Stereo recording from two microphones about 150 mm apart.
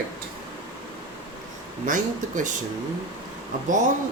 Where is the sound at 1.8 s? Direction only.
60° right (ahead or behind).